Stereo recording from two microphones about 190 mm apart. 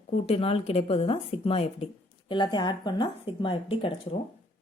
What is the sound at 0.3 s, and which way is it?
A woman's voice, 30° left (ahead or behind).